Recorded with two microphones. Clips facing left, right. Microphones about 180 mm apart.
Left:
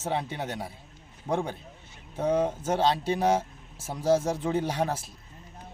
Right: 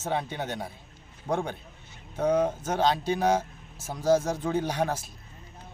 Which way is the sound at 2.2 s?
25° left (ahead or behind).